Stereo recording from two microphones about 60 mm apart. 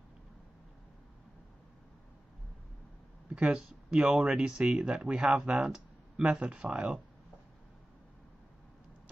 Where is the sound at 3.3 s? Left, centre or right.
Centre.